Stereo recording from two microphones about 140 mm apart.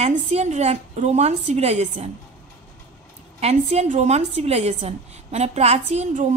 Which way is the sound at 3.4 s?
50° right (ahead or behind).